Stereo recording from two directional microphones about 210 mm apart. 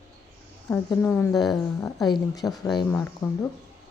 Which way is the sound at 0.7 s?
10° left (ahead or behind).